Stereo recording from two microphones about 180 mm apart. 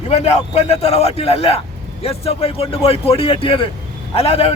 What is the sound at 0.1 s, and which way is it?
Speech, 35° left (ahead or behind).